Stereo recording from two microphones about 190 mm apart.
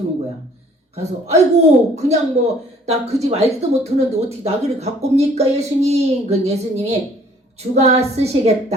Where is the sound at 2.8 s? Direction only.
35° right (ahead or behind).